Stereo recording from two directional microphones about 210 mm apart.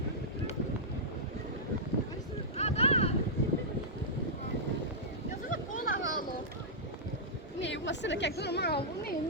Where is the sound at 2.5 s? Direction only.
30° left (ahead or behind).